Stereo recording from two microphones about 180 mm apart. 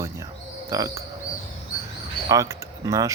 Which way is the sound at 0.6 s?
20° right (ahead or behind).